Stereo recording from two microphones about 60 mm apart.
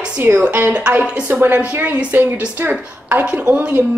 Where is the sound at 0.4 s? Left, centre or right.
Right.